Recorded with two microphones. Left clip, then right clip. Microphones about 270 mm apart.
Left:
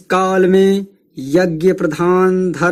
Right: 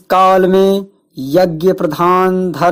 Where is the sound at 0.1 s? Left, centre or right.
Centre.